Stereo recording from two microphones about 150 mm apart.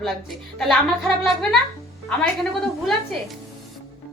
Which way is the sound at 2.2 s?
5° left (ahead or behind).